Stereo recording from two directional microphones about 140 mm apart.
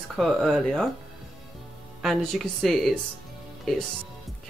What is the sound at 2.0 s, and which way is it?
Speech, centre (ahead or behind).